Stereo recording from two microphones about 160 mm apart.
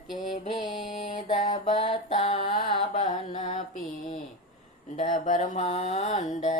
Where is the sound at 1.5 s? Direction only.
45° left (ahead or behind).